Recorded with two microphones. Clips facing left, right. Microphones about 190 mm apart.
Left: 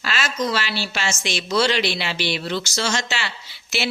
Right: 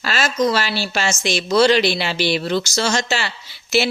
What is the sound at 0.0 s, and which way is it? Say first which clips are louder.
A woman's voice: right 6 dB; 40° right (ahead or behind).